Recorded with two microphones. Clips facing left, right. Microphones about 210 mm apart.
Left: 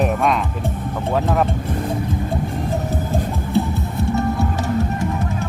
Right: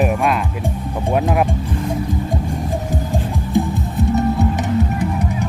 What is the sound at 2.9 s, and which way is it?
Music, 15° right (ahead or behind).